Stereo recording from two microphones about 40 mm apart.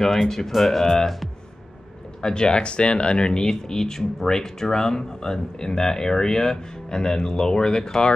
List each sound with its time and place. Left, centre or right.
0.0 s speech: centre
0.8 s speech: centre
2.2 s speech: left